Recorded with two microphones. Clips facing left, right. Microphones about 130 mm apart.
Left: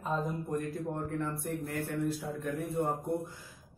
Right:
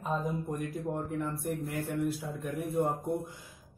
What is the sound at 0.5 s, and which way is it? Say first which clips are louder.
A man's voice: even; 15° right (ahead or behind).